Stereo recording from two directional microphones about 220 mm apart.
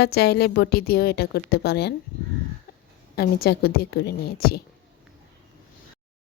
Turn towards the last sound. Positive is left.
turn(degrees=45)  # may be behind; listen again after turning